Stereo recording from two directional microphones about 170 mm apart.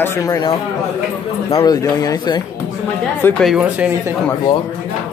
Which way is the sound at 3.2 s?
10° left (ahead or behind).